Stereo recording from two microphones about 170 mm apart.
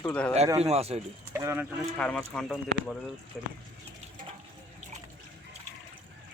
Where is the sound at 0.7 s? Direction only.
40° right (ahead or behind).